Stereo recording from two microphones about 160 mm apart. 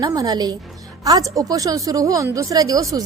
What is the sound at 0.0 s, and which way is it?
A woman's voice, 20° right (ahead or behind).